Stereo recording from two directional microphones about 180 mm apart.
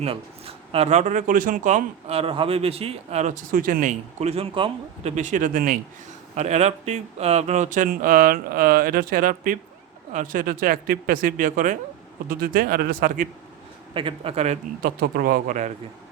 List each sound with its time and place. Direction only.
0.0 s speech: 30° right (ahead or behind); by 3.9 s 50° right (ahead or behind)
4.2 s speech: 35° right (ahead or behind)
5.1 s speech: 45° right (ahead or behind)
6.3 s speech: 40° right (ahead or behind)
13.9 s speech: 30° right (ahead or behind)
14.8 s speech: 55° right (ahead or behind)